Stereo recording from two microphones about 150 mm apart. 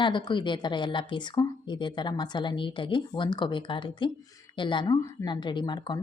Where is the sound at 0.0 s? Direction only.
30° left (ahead or behind).